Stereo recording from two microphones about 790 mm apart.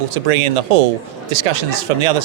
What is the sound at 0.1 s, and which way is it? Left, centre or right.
A man's voice, right.